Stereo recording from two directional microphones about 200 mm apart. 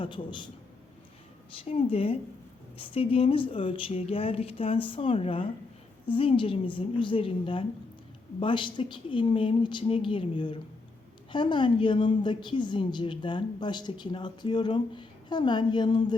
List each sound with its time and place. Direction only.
0.0 s a woman's voice: 25° left (ahead or behind)
1.5 s a woman's voice: 30° left (ahead or behind)